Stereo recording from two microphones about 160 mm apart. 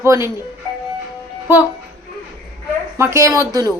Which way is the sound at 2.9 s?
15° right (ahead or behind).